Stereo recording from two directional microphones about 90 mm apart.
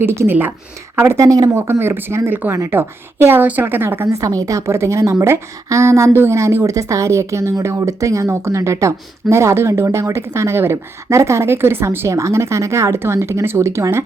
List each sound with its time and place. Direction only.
0.0 s speech: 25° right (ahead or behind)
1.6 s speech: 25° right (ahead or behind)